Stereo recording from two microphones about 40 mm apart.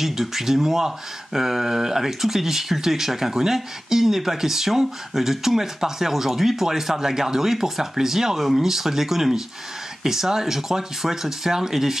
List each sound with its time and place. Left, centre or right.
0.0 s speech: centre